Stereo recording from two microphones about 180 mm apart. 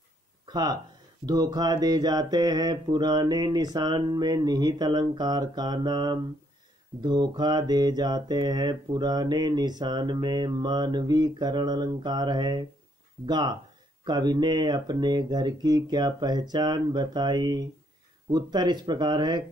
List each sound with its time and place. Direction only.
0.5 s speech: 20° right (ahead or behind)
1.2 s mantra: 20° right (ahead or behind)